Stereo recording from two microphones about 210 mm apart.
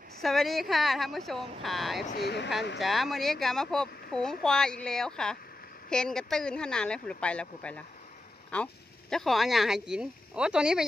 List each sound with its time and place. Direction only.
0.2 s speech: centre (ahead or behind)
2.0 s speech: 50° left (ahead or behind)
2.8 s speech: centre (ahead or behind)